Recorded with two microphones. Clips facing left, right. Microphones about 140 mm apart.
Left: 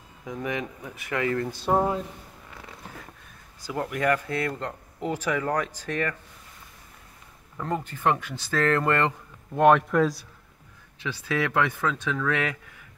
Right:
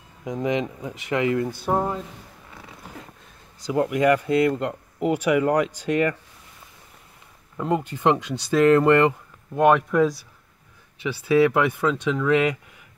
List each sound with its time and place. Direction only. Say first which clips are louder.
0.2 s speech: right 6 dB; 20° right (ahead or behind)
1.7 s speech: left 1 dB; 5° left (ahead or behind)
3.9 s speech: right 5 dB; 15° right (ahead or behind)
7.5 s speech: right 6 dB; 15° right (ahead or behind)
9.6 s speech: right 1 dB; 5° right (ahead or behind)